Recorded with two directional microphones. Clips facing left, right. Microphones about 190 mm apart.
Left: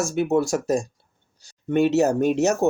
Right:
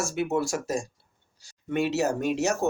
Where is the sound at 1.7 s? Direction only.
45° left (ahead or behind).